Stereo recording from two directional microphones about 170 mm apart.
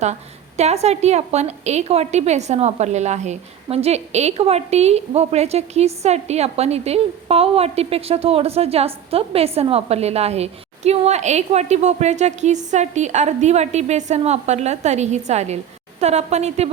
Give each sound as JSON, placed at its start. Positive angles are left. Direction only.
{"t": 0.0, "sound": "a woman's voice", "side_deg": -40}